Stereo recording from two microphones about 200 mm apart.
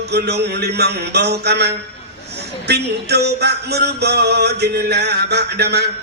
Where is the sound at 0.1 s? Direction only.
55° right (ahead or behind).